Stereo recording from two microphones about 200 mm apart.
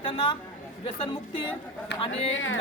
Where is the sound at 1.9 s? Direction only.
65° left (ahead or behind).